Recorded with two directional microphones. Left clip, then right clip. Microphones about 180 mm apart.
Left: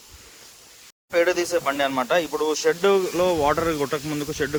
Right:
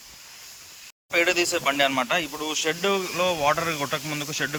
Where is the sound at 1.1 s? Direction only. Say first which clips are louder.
Left 1 dB; 25° left (ahead or behind).